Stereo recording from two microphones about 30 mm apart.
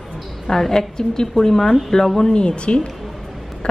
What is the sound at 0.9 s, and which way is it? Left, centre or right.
Speech, left.